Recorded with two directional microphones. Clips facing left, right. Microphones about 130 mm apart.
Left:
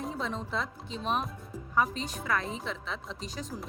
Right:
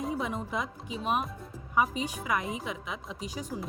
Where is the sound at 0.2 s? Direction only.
10° right (ahead or behind).